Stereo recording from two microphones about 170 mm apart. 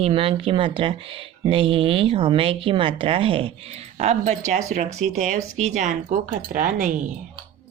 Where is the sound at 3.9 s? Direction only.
40° right (ahead or behind).